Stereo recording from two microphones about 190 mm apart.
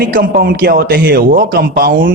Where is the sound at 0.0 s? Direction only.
50° right (ahead or behind).